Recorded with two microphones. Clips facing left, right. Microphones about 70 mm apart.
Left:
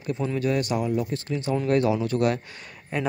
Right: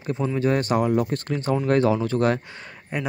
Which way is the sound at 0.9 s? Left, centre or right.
Right.